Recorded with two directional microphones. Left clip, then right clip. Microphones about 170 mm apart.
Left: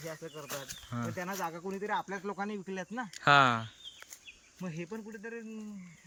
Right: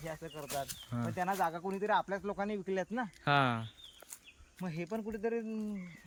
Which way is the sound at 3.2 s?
10° right (ahead or behind).